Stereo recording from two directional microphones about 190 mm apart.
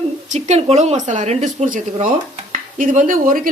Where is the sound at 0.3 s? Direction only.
35° right (ahead or behind).